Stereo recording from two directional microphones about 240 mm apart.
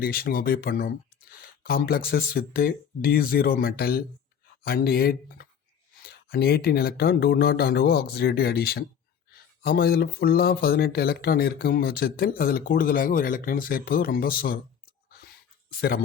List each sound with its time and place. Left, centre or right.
0.0 s speech: left